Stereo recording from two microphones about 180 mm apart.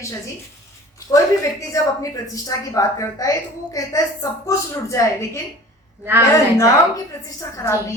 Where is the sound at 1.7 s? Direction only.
20° left (ahead or behind).